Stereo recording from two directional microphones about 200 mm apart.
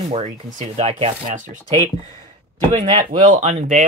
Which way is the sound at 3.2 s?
35° right (ahead or behind).